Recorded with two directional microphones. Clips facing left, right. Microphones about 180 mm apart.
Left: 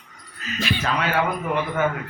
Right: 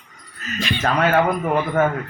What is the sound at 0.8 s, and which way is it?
Speech, 45° right (ahead or behind).